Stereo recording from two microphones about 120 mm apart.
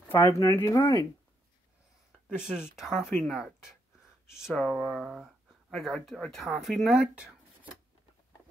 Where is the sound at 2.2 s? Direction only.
5° right (ahead or behind).